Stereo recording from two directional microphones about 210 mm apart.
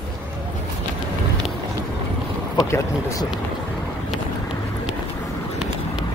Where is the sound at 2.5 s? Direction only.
15° left (ahead or behind).